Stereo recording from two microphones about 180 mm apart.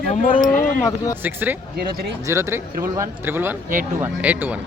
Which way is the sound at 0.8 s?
20° left (ahead or behind).